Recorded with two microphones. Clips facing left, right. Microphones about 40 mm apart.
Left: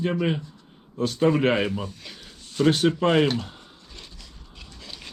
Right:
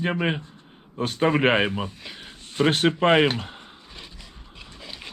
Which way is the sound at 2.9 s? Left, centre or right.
Right.